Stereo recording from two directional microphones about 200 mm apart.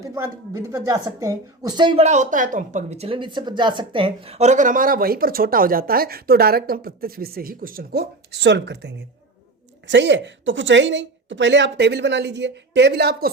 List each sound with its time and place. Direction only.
0.0 s a woman's voice: 15° right (ahead or behind); by 13.3 s 50° right (ahead or behind)